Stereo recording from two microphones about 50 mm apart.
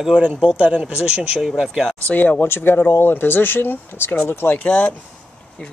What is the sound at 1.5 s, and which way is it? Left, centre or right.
Speech, centre.